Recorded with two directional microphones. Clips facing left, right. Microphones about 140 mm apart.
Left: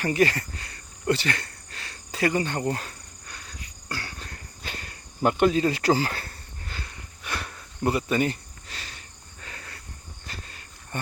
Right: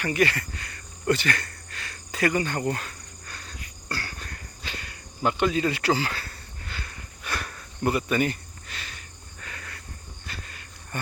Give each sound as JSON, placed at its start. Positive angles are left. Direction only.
{"t": 0.0, "sound": "speech", "side_deg": 35}
{"t": 3.2, "sound": "insect", "side_deg": 15}
{"t": 3.8, "sound": "cricket", "side_deg": 20}
{"t": 4.6, "sound": "cricket", "side_deg": 40}
{"t": 6.8, "sound": "cricket", "side_deg": 25}
{"t": 10.2, "sound": "walk", "side_deg": 35}